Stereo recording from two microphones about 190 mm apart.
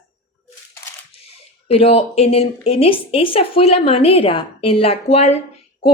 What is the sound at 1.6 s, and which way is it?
A woman's voice, 30° left (ahead or behind).